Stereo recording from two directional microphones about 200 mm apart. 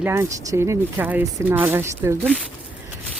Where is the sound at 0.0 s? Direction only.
15° right (ahead or behind).